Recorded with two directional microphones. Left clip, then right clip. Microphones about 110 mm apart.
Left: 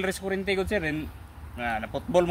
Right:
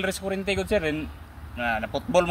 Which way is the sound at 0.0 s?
15° left (ahead or behind).